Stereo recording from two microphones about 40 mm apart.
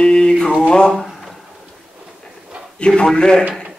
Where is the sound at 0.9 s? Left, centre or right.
Centre.